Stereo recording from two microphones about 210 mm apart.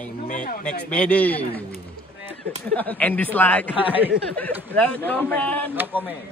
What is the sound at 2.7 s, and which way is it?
Speech, 5° left (ahead or behind).